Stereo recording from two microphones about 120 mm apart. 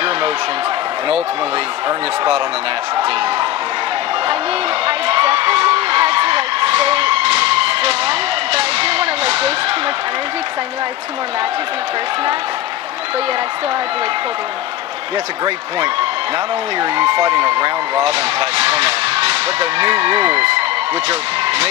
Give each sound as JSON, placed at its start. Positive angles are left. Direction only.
{"t": 1.9, "sound": "speech", "side_deg": -45}
{"t": 4.8, "sound": "a sound", "side_deg": -50}
{"t": 16.8, "sound": "speech", "side_deg": -45}